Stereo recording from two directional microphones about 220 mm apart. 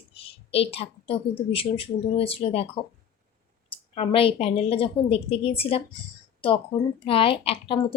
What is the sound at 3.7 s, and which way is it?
A woman's voice, 25° left (ahead or behind).